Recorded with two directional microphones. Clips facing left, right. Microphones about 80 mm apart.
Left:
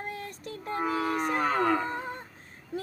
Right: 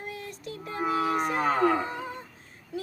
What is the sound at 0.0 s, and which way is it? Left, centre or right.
Child singing, left.